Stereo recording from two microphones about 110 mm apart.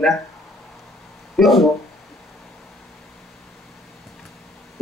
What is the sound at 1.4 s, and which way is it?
Speech, centre (ahead or behind).